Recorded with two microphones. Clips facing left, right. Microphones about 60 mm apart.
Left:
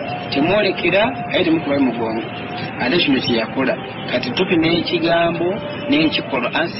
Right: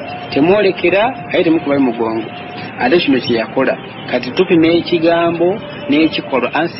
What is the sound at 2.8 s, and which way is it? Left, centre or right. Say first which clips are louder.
Speech: right 5 dB; right.